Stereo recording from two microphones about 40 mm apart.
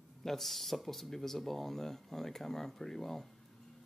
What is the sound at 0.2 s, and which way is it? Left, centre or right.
Speech, centre.